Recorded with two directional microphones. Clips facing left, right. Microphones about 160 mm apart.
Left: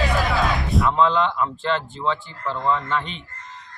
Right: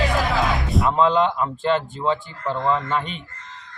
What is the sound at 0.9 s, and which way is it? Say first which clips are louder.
Speech: right 3 dB; 15° right (ahead or behind).